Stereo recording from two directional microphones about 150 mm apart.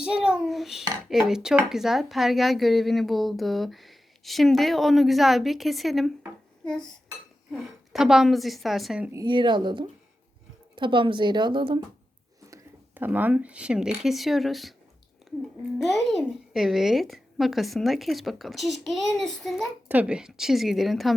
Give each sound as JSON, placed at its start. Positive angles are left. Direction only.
{"t": 0.0, "sound": "speech", "side_deg": -5}
{"t": 9.1, "sound": "a woman's voice", "side_deg": -30}
{"t": 12.5, "sound": "speech", "side_deg": -15}
{"t": 19.9, "sound": "speech", "side_deg": -10}